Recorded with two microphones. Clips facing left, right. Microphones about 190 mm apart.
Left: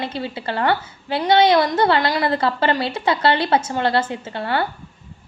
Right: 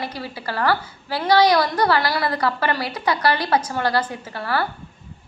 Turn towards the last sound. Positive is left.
turn(degrees=25)  # may be behind; listen again after turning